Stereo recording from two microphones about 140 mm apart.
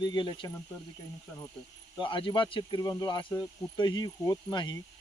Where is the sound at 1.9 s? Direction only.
35° left (ahead or behind).